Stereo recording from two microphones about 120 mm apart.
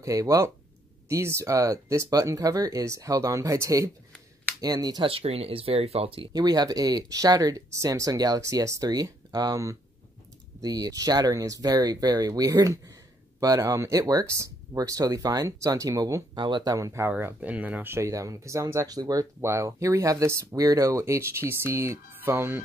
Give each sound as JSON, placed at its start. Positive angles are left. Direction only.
{"t": 0.0, "sound": "speech", "side_deg": -30}
{"t": 5.0, "sound": "speech", "side_deg": -55}
{"t": 6.3, "sound": "speech", "side_deg": -35}
{"t": 16.3, "sound": "speech", "side_deg": -40}
{"t": 16.7, "sound": "speech", "side_deg": -25}
{"t": 17.1, "sound": "speech", "side_deg": -15}